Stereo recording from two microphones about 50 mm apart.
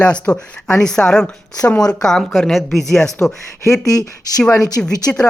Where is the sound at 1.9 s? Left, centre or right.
Centre.